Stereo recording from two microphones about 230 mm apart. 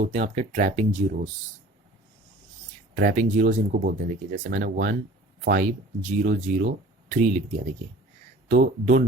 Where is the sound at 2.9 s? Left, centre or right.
Right.